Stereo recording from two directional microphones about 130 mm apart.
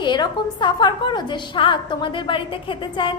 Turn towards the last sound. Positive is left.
turn(degrees=40)  # may be behind; listen again after turning